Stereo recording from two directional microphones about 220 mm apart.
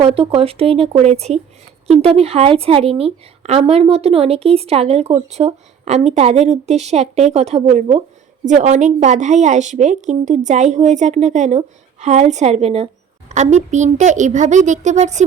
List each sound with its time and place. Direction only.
0.0 s a woman's voice: 25° right (ahead or behind)